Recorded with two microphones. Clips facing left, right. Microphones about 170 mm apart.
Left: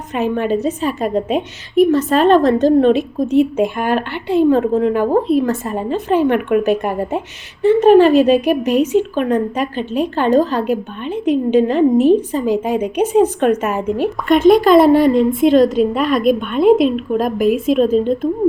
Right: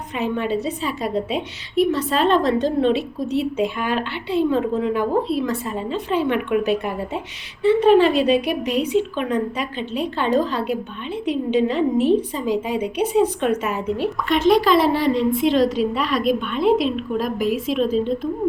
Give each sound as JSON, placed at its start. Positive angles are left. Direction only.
{"t": 0.1, "sound": "a woman's voice", "side_deg": 50}